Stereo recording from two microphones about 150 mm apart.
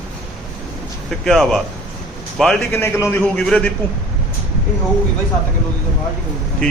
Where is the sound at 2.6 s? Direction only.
15° left (ahead or behind).